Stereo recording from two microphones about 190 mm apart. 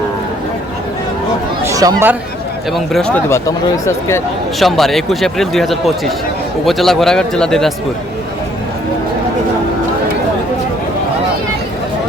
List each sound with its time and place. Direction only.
1.6 s chatter: 20° right (ahead or behind)
2.7 s speech: centre (ahead or behind)
3.2 s speech: 15° left (ahead or behind)
4.6 s speech: centre (ahead or behind)